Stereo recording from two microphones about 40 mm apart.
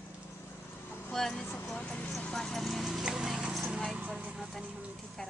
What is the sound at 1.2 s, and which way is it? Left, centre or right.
Speech, centre.